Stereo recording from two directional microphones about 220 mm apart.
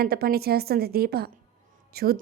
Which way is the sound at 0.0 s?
45° right (ahead or behind).